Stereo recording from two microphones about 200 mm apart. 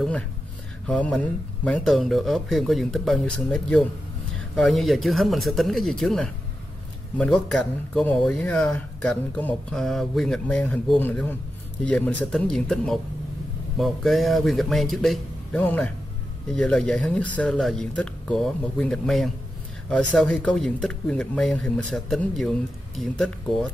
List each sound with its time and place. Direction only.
0.8 s speech: 5° left (ahead or behind)